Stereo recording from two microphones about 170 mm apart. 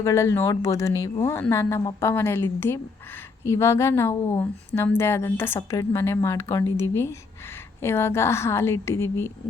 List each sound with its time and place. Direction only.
0.0 s a woman's voice: 20° left (ahead or behind)